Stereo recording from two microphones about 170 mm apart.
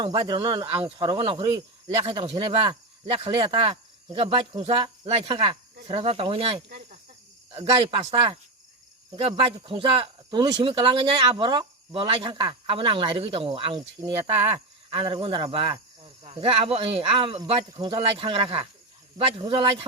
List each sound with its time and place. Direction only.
0.0 s speech: 25° right (ahead or behind)
9.1 s speech: 35° right (ahead or behind)